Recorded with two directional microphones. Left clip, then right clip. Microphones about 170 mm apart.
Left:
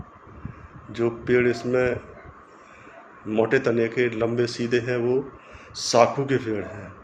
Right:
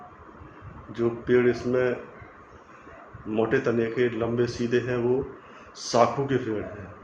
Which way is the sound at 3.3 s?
50° left (ahead or behind).